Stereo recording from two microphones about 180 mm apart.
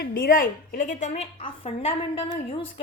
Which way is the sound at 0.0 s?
50° left (ahead or behind).